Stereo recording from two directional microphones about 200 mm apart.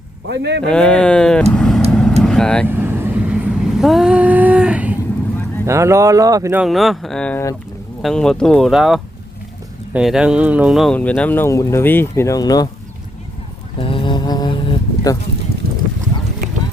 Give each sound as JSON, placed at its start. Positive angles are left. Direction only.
{"t": 0.3, "sound": "speech", "side_deg": -55}
{"t": 0.6, "sound": "speech", "side_deg": 5}
{"t": 1.5, "sound": "vehicle", "side_deg": 0}
{"t": 2.6, "sound": "vehicle", "side_deg": -10}
{"t": 5.6, "sound": "speech", "side_deg": -15}
{"t": 6.7, "sound": "speech", "side_deg": 0}
{"t": 13.7, "sound": "mantra", "side_deg": 25}
{"t": 15.6, "sound": "a sound", "side_deg": -50}